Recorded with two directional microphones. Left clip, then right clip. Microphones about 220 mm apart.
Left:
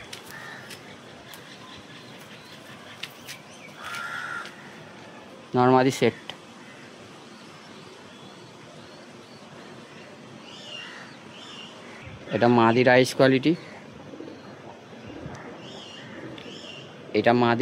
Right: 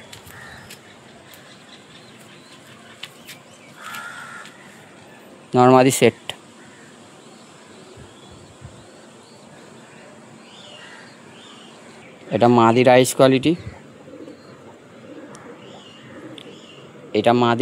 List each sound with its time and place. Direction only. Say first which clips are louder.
5.5 s speech: right 7 dB; 40° right (ahead or behind)
12.3 s speech: right 5 dB; 30° right (ahead or behind)
17.1 s speech: right 4 dB; 30° right (ahead or behind)